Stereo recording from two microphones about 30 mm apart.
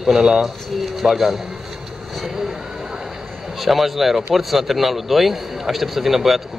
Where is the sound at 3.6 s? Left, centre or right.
Centre.